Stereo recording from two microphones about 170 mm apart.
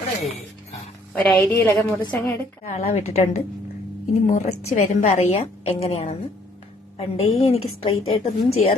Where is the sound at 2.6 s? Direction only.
40° left (ahead or behind).